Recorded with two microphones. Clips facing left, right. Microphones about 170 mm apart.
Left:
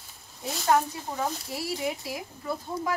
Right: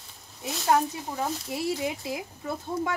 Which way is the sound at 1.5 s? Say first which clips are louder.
Right 2 dB; 20° right (ahead or behind).